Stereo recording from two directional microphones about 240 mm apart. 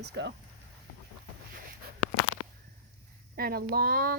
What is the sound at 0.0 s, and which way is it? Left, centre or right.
Speech, right.